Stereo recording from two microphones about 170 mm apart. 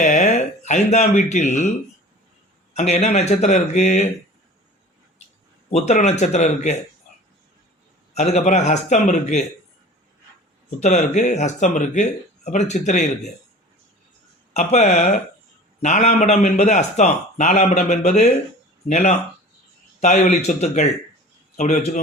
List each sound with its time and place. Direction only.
0.0 s speech: 45° left (ahead or behind)
2.7 s speech: 40° left (ahead or behind)
5.7 s a man's voice: 45° left (ahead or behind)
8.1 s a man's voice: 40° left (ahead or behind)
10.8 s a man's voice: 45° left (ahead or behind)
14.5 s a man's voice: 40° left (ahead or behind)